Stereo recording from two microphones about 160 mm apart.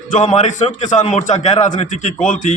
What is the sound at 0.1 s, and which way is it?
A man's voice, 50° left (ahead or behind).